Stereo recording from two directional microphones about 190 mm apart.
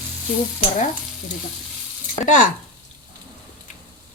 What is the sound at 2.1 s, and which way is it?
Speech, 40° left (ahead or behind).